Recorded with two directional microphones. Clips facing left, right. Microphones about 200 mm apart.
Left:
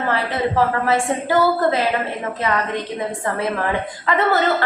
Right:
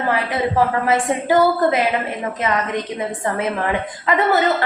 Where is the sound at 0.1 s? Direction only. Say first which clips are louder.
Right 1 dB; 15° right (ahead or behind).